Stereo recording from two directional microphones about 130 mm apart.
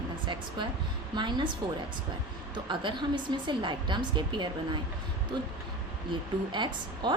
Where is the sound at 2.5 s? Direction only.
40° right (ahead or behind).